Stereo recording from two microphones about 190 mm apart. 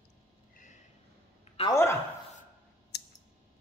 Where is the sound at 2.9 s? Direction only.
60° left (ahead or behind).